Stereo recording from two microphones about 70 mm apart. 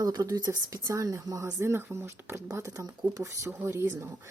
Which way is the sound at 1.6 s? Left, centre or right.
Right.